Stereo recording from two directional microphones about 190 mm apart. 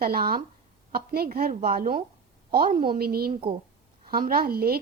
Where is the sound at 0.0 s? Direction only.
50° right (ahead or behind).